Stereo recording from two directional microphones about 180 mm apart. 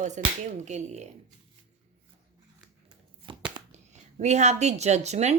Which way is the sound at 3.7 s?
40° right (ahead or behind).